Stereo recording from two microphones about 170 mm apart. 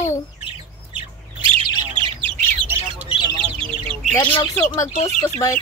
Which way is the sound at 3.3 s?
30° right (ahead or behind).